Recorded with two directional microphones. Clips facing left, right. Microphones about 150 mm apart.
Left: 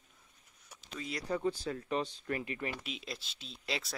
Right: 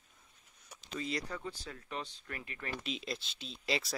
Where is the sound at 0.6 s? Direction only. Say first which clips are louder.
Right 3 dB; centre (ahead or behind).